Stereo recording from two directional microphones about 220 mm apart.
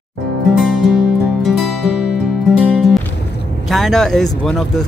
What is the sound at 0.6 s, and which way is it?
Music, centre (ahead or behind).